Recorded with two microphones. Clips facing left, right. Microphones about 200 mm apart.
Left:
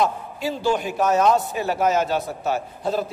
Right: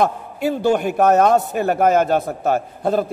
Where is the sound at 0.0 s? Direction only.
60° right (ahead or behind).